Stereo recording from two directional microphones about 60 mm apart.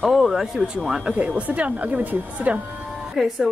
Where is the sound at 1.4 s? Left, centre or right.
Right.